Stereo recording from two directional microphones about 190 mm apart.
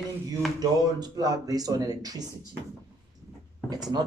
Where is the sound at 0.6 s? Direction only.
20° right (ahead or behind).